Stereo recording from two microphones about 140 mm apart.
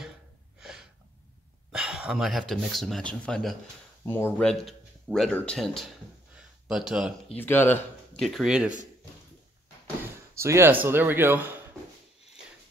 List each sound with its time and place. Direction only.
0.6 s gasp: 5° right (ahead or behind)
1.7 s speech: 5° right (ahead or behind)
4.0 s speech: 15° left (ahead or behind)
4.4 s speech: 5° left (ahead or behind)
6.3 s a sound: 5° right (ahead or behind)
7.3 s speech: 15° left (ahead or behind)
8.2 s speech: centre (ahead or behind)
10.4 s speech: 20° right (ahead or behind)